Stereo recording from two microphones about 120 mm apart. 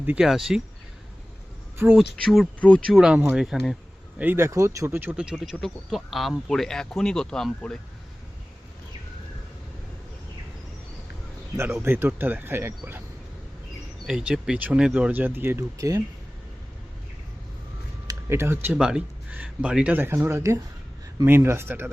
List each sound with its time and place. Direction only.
0.0 s speech: 15° right (ahead or behind)
0.3 s speech: centre (ahead or behind)
2.0 s speech: centre (ahead or behind)
2.6 s speech: 10° left (ahead or behind)
2.9 s speech: 5° right (ahead or behind)
4.2 s speech: 20° right (ahead or behind); by 7.8 s 5° left (ahead or behind)
11.8 s speech: 20° right (ahead or behind)
14.1 s speech: 5° right (ahead or behind); by 16.0 s 25° right (ahead or behind)
18.1 s speech: 20° right (ahead or behind)
18.7 s speech: 5° right (ahead or behind)